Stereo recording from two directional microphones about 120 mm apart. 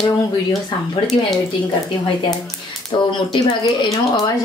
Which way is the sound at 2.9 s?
45° left (ahead or behind).